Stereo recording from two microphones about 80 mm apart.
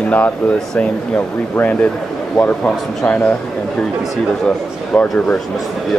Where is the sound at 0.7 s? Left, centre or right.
Centre.